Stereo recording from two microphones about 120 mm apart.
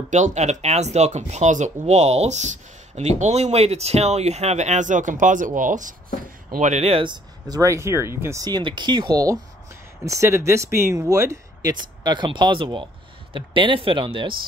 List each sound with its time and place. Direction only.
0.1 s speech: 80° right
6.6 s speech: 65° right (ahead or behind); by 7.2 s 50° right (ahead or behind)
7.4 s speech: 30° right (ahead or behind)
8.5 s speech: 40° right (ahead or behind)
11.7 s speech: 35° right (ahead or behind)